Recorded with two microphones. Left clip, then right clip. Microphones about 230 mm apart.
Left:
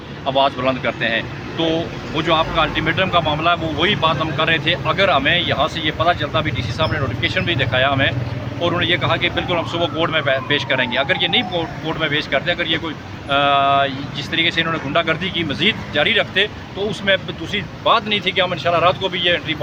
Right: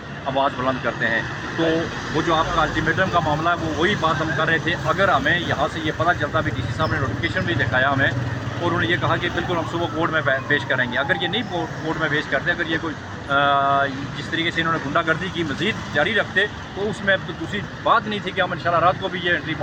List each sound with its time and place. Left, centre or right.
0.3 s speech: centre
2.3 s speech: centre
17.8 s speech: centre